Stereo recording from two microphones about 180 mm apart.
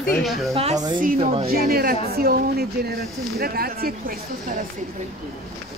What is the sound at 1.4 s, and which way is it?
A woman's voice, 55° right (ahead or behind).